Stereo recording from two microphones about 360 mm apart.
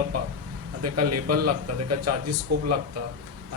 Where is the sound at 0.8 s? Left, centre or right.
Right.